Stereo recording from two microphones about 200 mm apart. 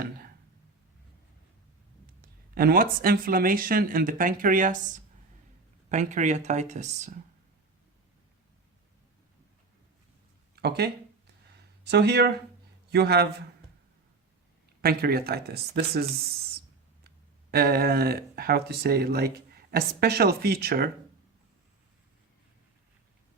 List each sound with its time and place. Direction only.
2.2 s speech: 45° right (ahead or behind)
5.9 s speech: 35° right (ahead or behind)
10.5 s speech: 55° right (ahead or behind)
14.8 s speech: 50° right (ahead or behind)
17.5 s speech: 50° right (ahead or behind)